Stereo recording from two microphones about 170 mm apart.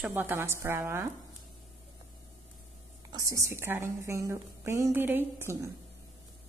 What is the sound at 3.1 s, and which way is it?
A woman's voice, 20° right (ahead or behind).